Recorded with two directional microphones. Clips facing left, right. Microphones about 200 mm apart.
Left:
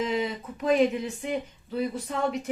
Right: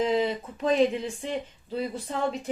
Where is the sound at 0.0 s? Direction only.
30° right (ahead or behind).